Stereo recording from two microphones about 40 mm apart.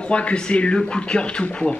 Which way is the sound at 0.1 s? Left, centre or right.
Left.